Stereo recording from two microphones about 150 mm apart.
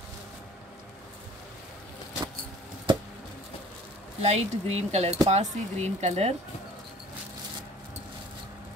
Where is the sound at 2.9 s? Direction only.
35° right (ahead or behind).